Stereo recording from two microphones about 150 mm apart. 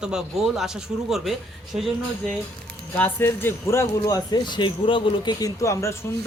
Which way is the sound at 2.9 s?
15° left (ahead or behind).